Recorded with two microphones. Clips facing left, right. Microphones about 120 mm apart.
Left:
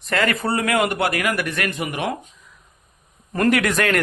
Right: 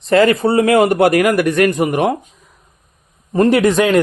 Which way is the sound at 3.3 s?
25° right (ahead or behind).